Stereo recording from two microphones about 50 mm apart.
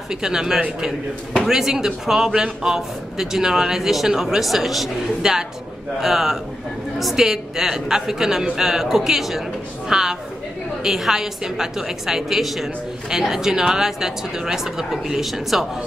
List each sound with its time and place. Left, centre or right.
0.1 s a man's voice: centre
1.4 s a woman's voice: centre